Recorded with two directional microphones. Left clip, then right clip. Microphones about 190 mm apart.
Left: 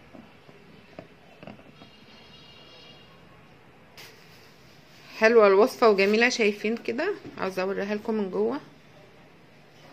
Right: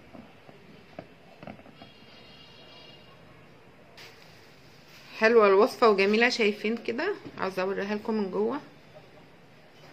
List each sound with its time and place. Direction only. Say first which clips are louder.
5.1 s speech: left 2 dB; 15° left (ahead or behind)